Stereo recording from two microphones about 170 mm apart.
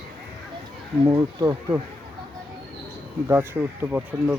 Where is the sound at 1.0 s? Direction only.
20° right (ahead or behind).